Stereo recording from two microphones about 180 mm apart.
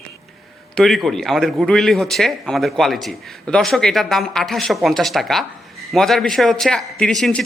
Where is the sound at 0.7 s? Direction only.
Centre (ahead or behind).